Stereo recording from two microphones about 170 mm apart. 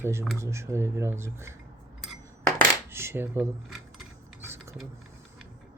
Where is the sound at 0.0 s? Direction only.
15° right (ahead or behind).